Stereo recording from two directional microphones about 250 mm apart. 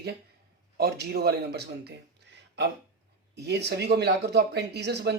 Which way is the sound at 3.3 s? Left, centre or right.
Right.